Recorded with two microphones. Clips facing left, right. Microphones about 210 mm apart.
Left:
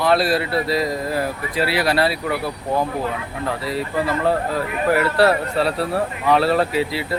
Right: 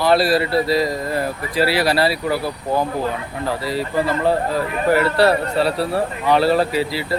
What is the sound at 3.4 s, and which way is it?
Speech, centre (ahead or behind).